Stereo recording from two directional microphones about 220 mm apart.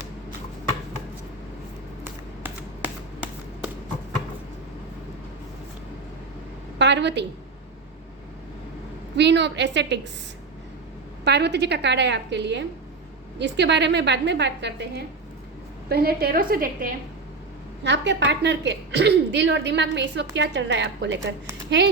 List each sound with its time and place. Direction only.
6.7 s a woman's voice: 55° right (ahead or behind)
9.1 s a woman's voice: 55° right (ahead or behind)
11.3 s a woman's voice: 50° right (ahead or behind)
17.8 s a woman's voice: 55° right (ahead or behind)